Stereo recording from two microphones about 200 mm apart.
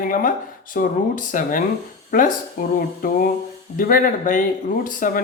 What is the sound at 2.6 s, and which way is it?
Speech, 45° left (ahead or behind).